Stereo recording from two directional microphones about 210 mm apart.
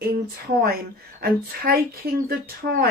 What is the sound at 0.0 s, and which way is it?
A woman's voice, 50° right (ahead or behind).